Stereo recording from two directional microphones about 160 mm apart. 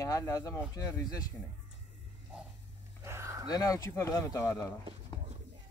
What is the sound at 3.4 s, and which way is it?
Speech, 20° left (ahead or behind).